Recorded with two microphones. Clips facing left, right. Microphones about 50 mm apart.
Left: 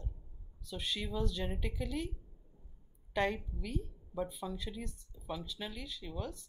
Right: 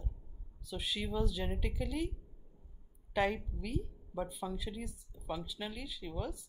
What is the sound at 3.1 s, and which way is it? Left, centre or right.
Speech, centre.